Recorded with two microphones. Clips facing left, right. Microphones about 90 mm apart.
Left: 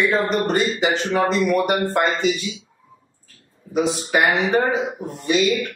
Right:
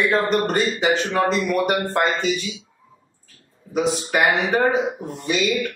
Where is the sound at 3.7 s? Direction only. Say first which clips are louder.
Left 1 dB; centre (ahead or behind).